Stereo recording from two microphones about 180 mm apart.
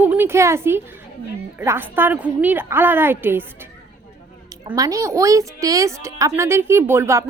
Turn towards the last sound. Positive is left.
turn(degrees=-15)  # may be behind; listen again after turning